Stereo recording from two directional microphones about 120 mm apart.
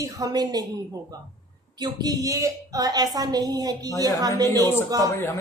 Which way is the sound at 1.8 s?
35° right (ahead or behind).